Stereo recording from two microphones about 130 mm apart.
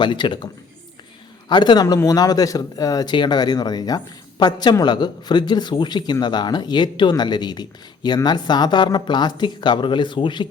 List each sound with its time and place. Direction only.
0.0 s speech: 35° left (ahead or behind)
1.5 s speech: 35° left (ahead or behind)